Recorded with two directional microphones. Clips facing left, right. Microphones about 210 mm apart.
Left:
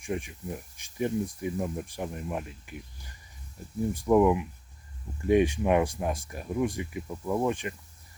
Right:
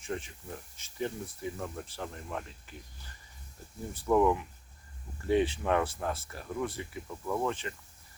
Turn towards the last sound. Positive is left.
turn(degrees=15)  # may be behind; listen again after turning